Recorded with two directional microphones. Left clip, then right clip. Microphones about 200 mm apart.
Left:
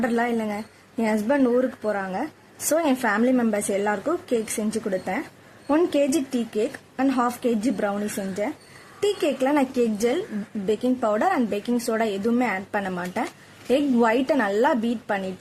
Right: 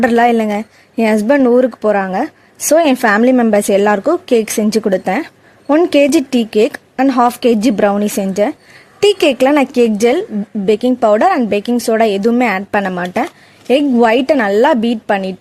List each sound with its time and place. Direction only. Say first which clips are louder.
0.0 s a woman's voice: right 13 dB; 40° right (ahead or behind)